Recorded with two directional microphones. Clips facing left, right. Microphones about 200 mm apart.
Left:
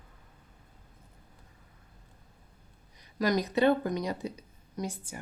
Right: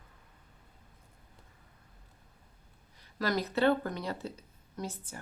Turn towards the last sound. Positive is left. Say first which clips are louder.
# left 3 dB
turn(degrees=15)  # may be behind; listen again after turning